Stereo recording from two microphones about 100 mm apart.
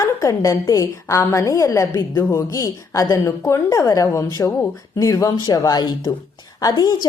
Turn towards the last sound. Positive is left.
turn(degrees=40)  # may be behind; listen again after turning